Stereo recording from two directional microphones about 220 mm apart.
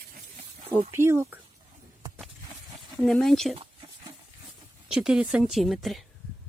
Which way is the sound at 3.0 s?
Centre (ahead or behind).